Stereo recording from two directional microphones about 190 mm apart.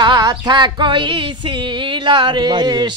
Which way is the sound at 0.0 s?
20° right (ahead or behind).